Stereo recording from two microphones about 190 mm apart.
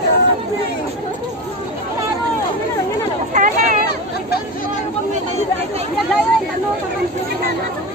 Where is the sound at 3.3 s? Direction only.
45° right (ahead or behind).